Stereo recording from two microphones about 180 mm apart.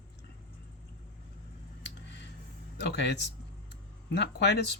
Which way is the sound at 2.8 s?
70° left (ahead or behind).